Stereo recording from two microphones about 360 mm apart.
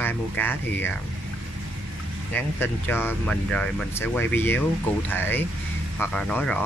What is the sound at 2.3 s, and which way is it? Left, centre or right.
Speech, centre.